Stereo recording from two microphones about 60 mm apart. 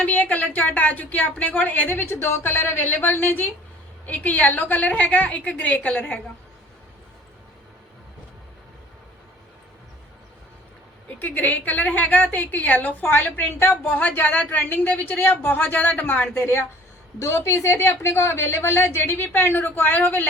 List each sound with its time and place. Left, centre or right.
0.0 s a woman's voice: left
11.2 s a woman's voice: left